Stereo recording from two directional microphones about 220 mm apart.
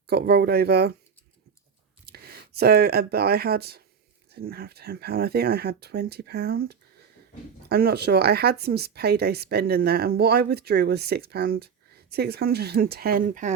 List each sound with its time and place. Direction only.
0.1 s speech: 45° right (ahead or behind)
2.0 s speech: 45° right (ahead or behind)